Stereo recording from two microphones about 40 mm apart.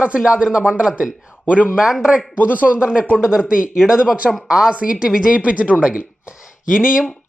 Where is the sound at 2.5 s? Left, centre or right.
Right.